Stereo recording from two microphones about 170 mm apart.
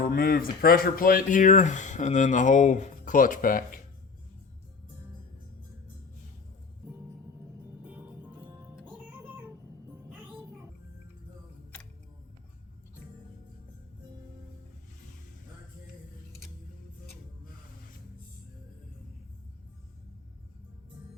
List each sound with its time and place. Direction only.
0.0 s speech: 65° left (ahead or behind)
8.7 s music: 10° right (ahead or behind)